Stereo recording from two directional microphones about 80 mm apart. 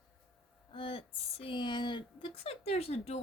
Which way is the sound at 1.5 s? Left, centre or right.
Left.